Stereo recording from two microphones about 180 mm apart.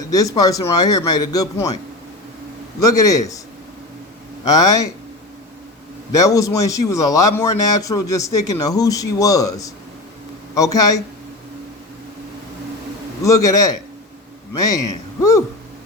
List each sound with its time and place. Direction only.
0.1 s a man's voice: 20° left (ahead or behind)
2.8 s a man's voice: 20° left (ahead or behind)
4.4 s a man's voice: 20° left (ahead or behind)
6.1 s a man's voice: 20° left (ahead or behind)
13.2 s a man's voice: 20° left (ahead or behind)